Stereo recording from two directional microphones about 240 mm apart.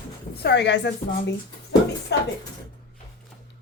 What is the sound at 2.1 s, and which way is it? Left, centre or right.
Speech, left.